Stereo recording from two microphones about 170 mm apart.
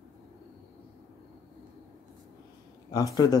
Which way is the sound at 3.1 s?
20° left (ahead or behind).